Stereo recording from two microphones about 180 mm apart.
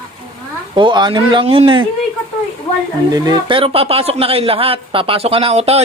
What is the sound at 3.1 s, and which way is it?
Speech, 20° right (ahead or behind).